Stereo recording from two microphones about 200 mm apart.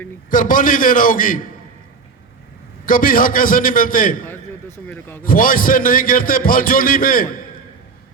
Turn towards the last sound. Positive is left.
turn(degrees=45)  # may be behind; listen again after turning